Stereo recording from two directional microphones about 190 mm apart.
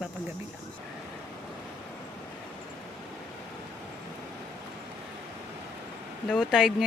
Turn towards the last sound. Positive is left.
turn(degrees=-5)  # may be behind; listen again after turning